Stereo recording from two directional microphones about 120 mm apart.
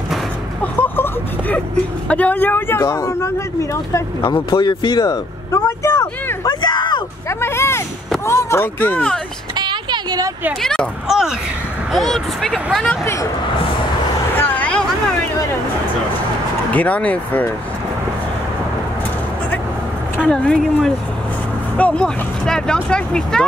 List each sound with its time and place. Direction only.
0.8 s a sound: 15° left (ahead or behind)
2.0 s speech: 10° left (ahead or behind)
4.2 s speech: 35° left (ahead or behind)
7.2 s speech: 20° left (ahead or behind)
9.6 s a sound: 40° right (ahead or behind)
10.6 s speech: 5° left (ahead or behind)
13.0 s speech: 25° left (ahead or behind)
14.3 s vehicle: 15° left (ahead or behind)
16.7 s speech: 10° left (ahead or behind)
20.2 s speech: 5° left (ahead or behind)